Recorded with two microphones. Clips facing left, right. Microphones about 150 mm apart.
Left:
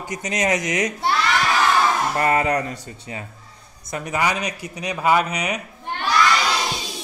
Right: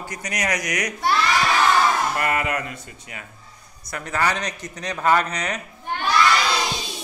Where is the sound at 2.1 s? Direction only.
30° left (ahead or behind).